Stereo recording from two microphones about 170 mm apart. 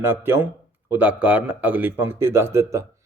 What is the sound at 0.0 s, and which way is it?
A man's voice, 15° right (ahead or behind).